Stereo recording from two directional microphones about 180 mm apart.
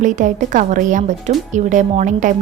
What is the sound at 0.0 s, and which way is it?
A woman's voice, 45° right (ahead or behind).